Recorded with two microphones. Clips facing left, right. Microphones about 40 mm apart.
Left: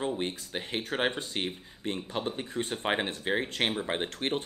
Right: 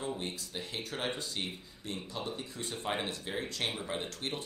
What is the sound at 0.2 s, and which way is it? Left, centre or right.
Speech, left.